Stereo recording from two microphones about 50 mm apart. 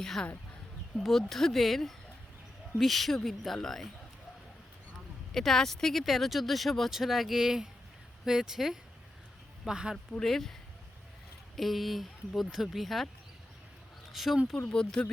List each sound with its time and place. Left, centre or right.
0.0 s speech: centre
5.3 s speech: centre
10.1 s speech: centre
11.5 s speech: centre
14.1 s speech: centre
14.7 s speech: centre